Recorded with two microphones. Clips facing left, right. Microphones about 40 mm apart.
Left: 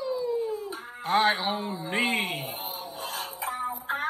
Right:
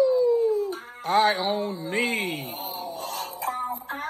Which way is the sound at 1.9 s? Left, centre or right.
Left.